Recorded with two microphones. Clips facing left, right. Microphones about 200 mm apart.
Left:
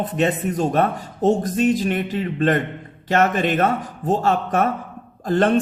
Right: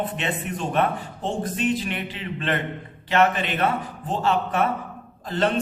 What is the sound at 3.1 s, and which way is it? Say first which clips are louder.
Speech: left 3 dB; 45° left (ahead or behind).